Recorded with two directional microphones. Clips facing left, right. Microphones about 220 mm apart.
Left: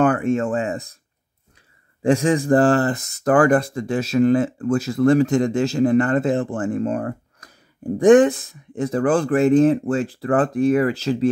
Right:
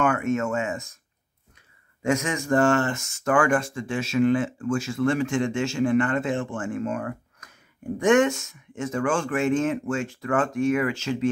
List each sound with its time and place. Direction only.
0.0 s speech: 35° left (ahead or behind)
2.0 s speech: 35° left (ahead or behind)